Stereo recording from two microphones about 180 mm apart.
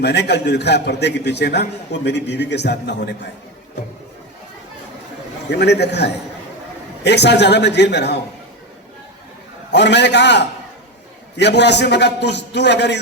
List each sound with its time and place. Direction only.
0.0 s a man's voice: 70° left (ahead or behind)
5.5 s a man's voice: 65° left (ahead or behind)
9.7 s a man's voice: 70° left (ahead or behind)